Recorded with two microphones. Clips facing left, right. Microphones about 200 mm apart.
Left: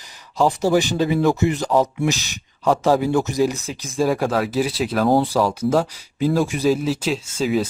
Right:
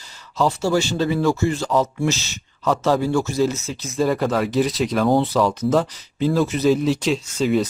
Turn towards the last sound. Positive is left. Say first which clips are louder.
# right 1 dB
turn(degrees=5)  # may be behind; listen again after turning